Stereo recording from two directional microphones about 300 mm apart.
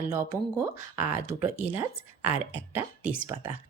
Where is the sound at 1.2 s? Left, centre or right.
Right.